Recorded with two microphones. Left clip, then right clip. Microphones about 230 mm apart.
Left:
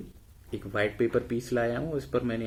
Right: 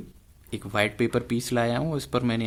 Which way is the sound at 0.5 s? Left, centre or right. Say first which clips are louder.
Right 3 dB; right.